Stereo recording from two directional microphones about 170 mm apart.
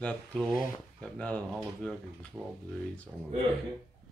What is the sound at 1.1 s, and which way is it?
Speech, 5° left (ahead or behind).